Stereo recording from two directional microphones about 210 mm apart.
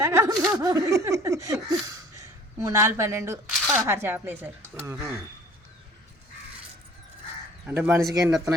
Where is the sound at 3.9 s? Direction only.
10° right (ahead or behind).